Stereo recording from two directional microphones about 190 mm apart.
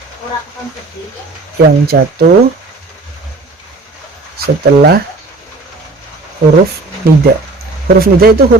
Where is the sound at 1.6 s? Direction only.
55° right (ahead or behind).